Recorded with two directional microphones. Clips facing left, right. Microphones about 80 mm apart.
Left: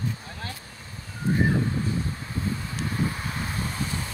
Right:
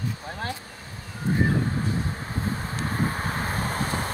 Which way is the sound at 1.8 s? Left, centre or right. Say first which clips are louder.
Right 1 dB; right.